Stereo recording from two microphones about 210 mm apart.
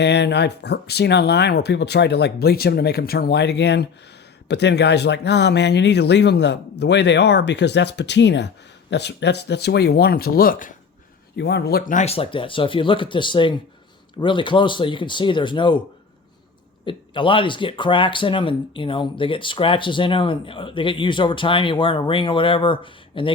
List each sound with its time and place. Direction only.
0.0 s speech: 55° left (ahead or behind)
11.3 s speech: 50° left (ahead or behind); by 15.8 s 20° left (ahead or behind)
16.8 s speech: 25° left (ahead or behind)